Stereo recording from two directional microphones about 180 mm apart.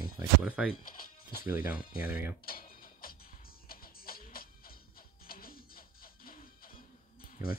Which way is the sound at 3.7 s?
55° left (ahead or behind).